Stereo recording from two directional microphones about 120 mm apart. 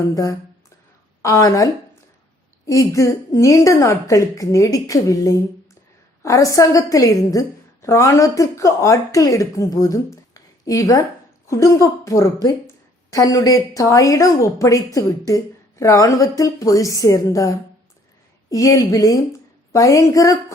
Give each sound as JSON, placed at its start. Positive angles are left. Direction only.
{"t": 0.1, "sound": "a woman's voice", "side_deg": 30}
{"t": 2.6, "sound": "a woman's voice", "side_deg": 25}
{"t": 18.5, "sound": "a woman's voice", "side_deg": 30}